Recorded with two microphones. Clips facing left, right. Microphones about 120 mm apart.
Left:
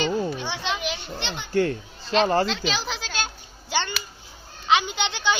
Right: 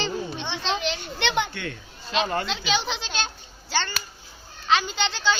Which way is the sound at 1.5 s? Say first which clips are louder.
Left 12 dB; 35° left (ahead or behind).